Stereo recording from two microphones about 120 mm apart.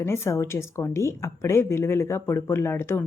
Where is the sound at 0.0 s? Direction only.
20° left (ahead or behind).